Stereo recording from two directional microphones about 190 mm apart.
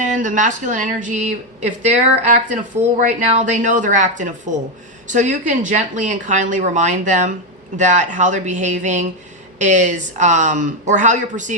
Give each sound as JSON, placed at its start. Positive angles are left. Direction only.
{"t": 0.0, "sound": "speech", "side_deg": -40}